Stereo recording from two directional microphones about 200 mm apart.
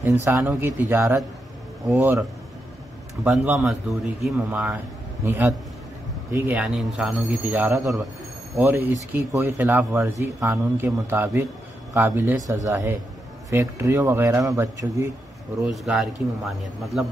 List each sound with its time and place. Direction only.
0.0 s speech: 10° right (ahead or behind)
3.3 s a man's voice: 5° right (ahead or behind)
15.6 s a man's voice: centre (ahead or behind)